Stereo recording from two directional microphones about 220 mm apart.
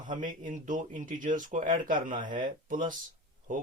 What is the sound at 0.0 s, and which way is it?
Speech, 35° right (ahead or behind).